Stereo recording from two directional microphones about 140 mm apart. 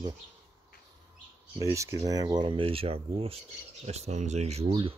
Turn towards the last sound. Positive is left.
turn(degrees=-40)  # may be behind; listen again after turning